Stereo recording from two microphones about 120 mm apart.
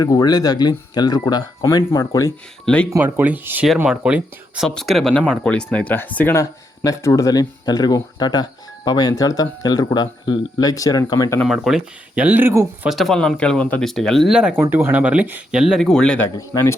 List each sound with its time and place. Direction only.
0.0 s speech: 30° left (ahead or behind)
2.6 s speech: 10° left (ahead or behind)
3.0 s speech: 15° right (ahead or behind); by 6.3 s 15° left (ahead or behind)
6.3 s speech: 25° left (ahead or behind)
11.4 s speech: centre (ahead or behind); by 12.9 s 20° right (ahead or behind)
12.9 s speech: centre (ahead or behind)
14.6 s speech: 20° right (ahead or behind); by 16.3 s 10° left (ahead or behind)